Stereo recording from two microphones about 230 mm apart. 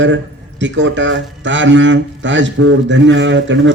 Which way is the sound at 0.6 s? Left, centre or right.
Right.